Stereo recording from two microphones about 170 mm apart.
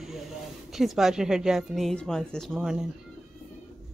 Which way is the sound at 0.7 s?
Centre (ahead or behind).